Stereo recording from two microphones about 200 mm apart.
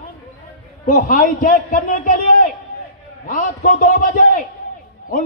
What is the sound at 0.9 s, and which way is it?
A man's voice, 40° left (ahead or behind).